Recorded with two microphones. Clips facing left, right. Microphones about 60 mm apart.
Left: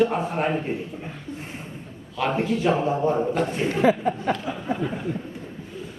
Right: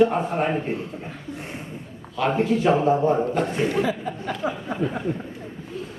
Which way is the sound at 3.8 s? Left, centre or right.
Left.